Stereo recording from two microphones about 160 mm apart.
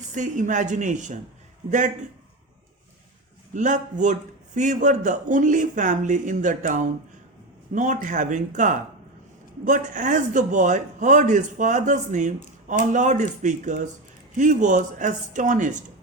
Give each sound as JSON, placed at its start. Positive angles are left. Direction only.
{"t": 0.1, "sound": "a man's voice", "side_deg": -50}
{"t": 3.5, "sound": "a man's voice", "side_deg": -50}